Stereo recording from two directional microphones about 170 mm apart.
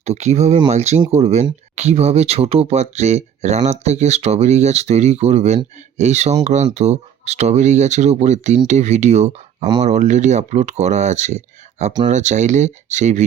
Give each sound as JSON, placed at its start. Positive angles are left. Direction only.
{"t": 0.0, "sound": "speech", "side_deg": -40}